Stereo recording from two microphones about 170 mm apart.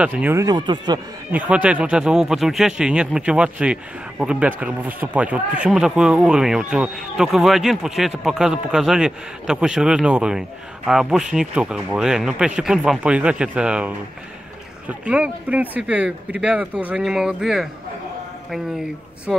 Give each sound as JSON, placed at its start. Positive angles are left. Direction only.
{"t": 0.0, "sound": "speech", "side_deg": -10}
{"t": 1.3, "sound": "speech", "side_deg": -5}